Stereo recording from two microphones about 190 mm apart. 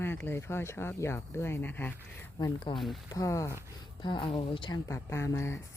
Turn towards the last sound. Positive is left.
turn(degrees=15)  # may be behind; listen again after turning